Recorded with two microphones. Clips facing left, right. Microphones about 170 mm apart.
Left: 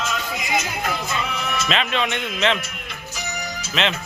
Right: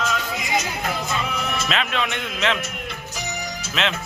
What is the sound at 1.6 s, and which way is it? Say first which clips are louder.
Speech: left 3 dB; centre (ahead or behind).